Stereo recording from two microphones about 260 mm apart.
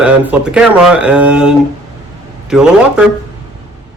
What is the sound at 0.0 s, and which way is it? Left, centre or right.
Speech, centre.